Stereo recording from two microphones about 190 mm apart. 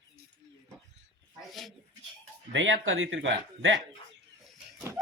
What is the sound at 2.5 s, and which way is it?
Speech, 85° right.